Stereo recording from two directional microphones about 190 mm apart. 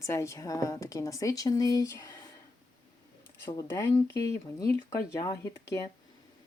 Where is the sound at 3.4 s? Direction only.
10° left (ahead or behind).